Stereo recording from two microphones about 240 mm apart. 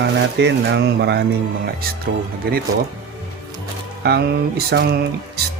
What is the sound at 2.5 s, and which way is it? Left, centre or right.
Speech, right.